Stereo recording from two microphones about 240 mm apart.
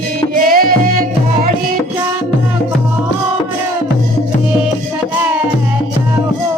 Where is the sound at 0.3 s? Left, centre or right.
Right.